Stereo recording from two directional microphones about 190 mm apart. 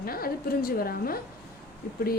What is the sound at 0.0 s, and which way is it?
A woman's voice, 50° left (ahead or behind).